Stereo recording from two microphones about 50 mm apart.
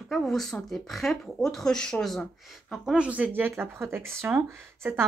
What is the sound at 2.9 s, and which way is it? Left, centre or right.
Speech, right.